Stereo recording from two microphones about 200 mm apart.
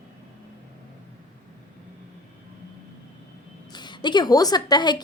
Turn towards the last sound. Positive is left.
turn(degrees=20)  # may be behind; listen again after turning